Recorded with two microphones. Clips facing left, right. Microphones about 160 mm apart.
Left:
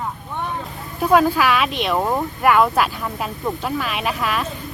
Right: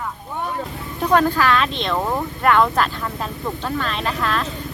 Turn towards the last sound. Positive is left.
turn(degrees=10)  # may be behind; listen again after turning